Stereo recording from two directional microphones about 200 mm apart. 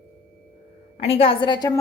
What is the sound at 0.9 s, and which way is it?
Speech, 30° left (ahead or behind).